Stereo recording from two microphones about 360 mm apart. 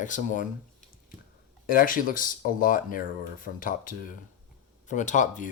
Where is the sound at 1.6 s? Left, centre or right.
Left.